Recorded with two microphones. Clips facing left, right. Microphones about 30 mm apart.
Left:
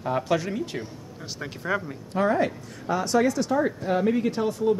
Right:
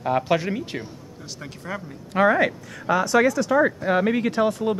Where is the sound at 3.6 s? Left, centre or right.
Right.